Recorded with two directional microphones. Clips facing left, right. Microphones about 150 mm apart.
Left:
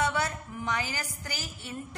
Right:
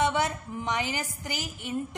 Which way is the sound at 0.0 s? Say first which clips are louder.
Right 3 dB; 20° right (ahead or behind).